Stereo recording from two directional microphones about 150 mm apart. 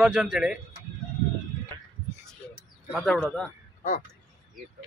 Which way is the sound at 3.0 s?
5° left (ahead or behind).